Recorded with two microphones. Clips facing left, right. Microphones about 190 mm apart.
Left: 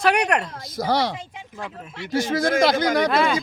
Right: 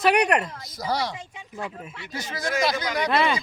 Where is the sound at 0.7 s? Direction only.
90° left.